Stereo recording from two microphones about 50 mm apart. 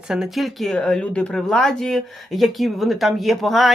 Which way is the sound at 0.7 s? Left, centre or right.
Centre.